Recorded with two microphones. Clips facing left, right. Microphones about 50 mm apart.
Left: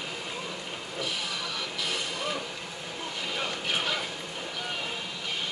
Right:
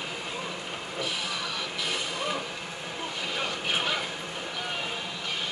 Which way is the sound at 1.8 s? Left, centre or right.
Centre.